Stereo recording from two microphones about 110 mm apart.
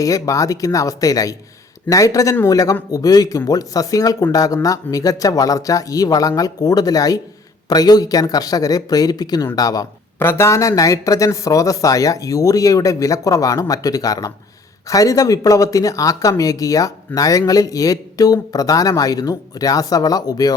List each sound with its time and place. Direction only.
0.0 s speech: 30° left (ahead or behind)
10.2 s speech: 20° left (ahead or behind)